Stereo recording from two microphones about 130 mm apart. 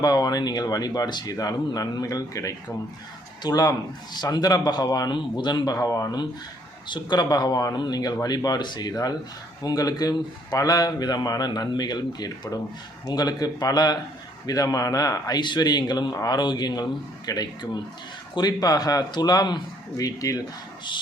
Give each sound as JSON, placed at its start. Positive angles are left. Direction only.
{"t": 0.0, "sound": "a man's voice", "side_deg": 30}